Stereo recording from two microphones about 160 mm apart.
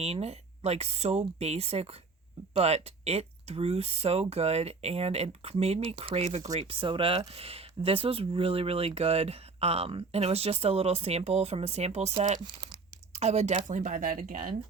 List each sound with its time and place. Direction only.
0.0 s speech: 40° right (ahead or behind); by 14.5 s 55° right (ahead or behind)